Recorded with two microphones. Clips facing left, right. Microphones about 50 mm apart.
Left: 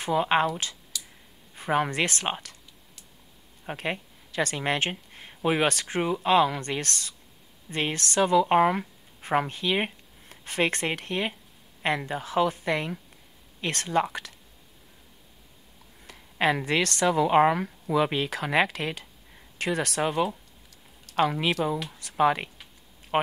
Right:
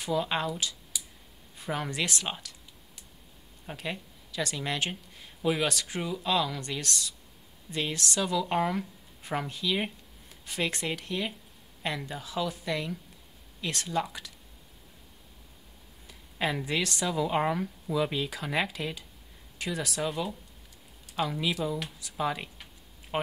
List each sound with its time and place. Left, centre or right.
0.0 s speech: left
0.9 s clicking: centre
1.5 s speech: left
3.6 s speech: left
16.1 s speech: left